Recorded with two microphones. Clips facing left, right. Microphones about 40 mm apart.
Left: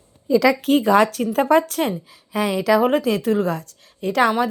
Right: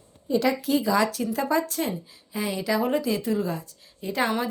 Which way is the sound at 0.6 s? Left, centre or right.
Left.